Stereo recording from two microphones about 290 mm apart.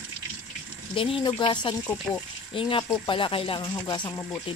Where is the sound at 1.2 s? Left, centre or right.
Centre.